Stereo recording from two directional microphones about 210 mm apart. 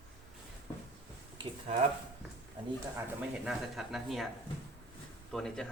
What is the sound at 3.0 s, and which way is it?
Speech, 5° right (ahead or behind).